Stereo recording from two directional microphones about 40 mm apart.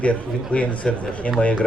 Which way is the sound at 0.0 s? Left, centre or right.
Left.